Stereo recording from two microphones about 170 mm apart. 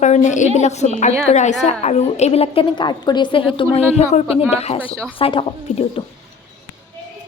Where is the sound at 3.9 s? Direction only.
40° left (ahead or behind).